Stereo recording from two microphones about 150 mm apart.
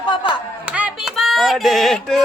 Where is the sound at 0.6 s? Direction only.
10° right (ahead or behind).